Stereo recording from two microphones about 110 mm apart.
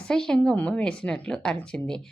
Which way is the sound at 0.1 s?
5° left (ahead or behind).